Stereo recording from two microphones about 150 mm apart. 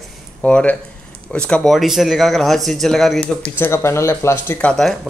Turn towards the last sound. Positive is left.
turn(degrees=15)  # may be behind; listen again after turning